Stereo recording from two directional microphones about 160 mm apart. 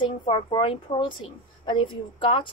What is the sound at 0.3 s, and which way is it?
A woman's voice, 35° left (ahead or behind).